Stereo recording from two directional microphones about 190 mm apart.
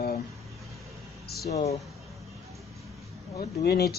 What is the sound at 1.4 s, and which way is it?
Speech, 35° left (ahead or behind).